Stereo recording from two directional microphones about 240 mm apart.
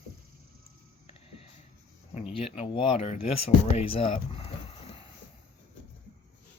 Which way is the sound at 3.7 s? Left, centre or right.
Left.